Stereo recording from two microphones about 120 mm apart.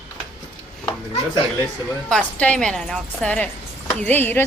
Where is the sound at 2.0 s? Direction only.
10° left (ahead or behind).